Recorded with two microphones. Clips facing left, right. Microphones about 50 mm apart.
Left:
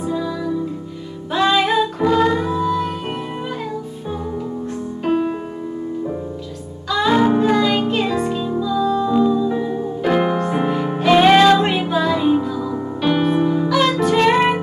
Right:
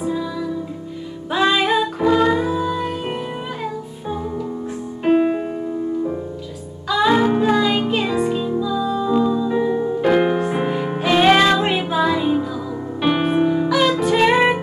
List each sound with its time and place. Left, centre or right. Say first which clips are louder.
0.0 s music: left 1 dB; centre
5.0 s music: right 4 dB; right
6.9 s music: even; centre
13.0 s music: even; centre
13.7 s music: even; centre